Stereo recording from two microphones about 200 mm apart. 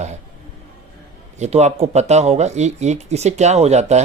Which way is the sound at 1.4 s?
35° right (ahead or behind).